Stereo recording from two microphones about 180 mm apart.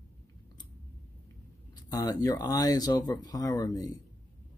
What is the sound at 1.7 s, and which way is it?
Speech, 20° left (ahead or behind).